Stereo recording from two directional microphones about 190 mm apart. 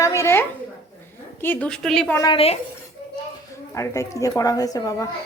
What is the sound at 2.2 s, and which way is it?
Speech, 25° left (ahead or behind).